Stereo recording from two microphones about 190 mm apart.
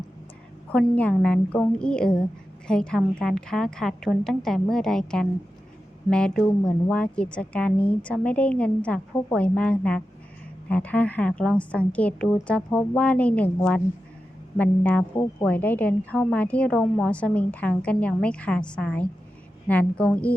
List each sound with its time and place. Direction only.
0.7 s a woman's voice: 5° left (ahead or behind)